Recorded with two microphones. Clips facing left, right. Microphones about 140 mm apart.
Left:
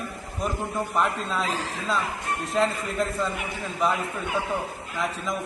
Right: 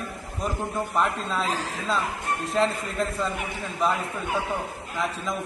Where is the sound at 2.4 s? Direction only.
Centre (ahead or behind).